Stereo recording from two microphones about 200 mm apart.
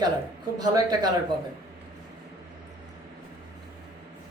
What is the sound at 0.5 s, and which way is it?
Speech, 20° right (ahead or behind).